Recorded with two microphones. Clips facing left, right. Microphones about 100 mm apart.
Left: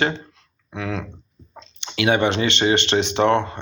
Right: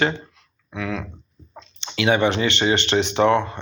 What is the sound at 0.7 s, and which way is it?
Speech, 35° left (ahead or behind).